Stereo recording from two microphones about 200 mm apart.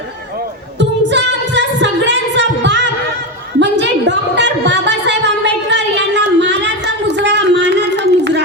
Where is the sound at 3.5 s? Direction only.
60° right (ahead or behind).